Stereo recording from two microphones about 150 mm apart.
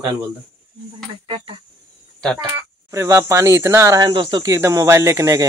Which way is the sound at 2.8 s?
20° right (ahead or behind).